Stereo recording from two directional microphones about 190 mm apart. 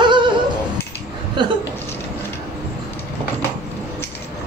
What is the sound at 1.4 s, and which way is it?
Speech, 25° right (ahead or behind).